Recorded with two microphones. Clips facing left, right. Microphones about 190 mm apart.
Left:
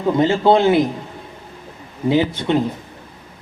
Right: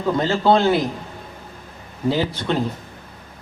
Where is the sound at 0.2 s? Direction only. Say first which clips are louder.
Left 3 dB; 20° left (ahead or behind).